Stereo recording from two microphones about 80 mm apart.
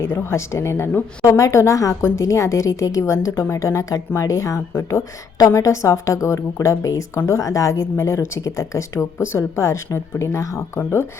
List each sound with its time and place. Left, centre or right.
0.1 s speech: left
1.4 s a woman's voice: left